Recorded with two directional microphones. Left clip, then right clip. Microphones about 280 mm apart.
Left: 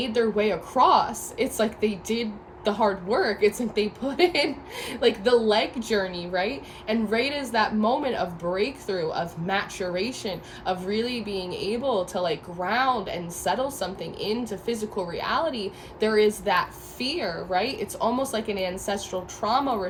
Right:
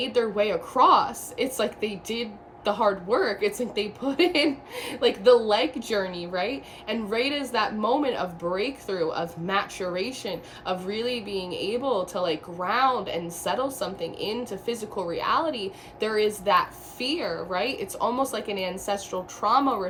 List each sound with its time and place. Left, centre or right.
0.0 s a woman's voice: centre